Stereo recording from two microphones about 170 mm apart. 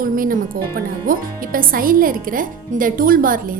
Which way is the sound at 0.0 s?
55° right (ahead or behind).